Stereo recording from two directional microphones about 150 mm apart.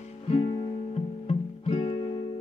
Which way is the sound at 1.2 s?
40° left (ahead or behind).